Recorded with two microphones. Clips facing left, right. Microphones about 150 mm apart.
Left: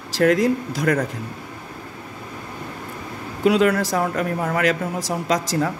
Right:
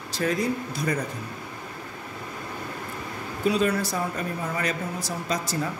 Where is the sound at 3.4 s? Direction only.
90° left.